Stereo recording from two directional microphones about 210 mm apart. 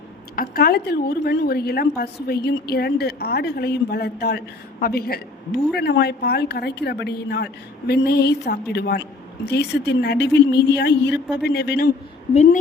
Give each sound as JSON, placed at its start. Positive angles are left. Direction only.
{"t": 0.3, "sound": "a woman's voice", "side_deg": 45}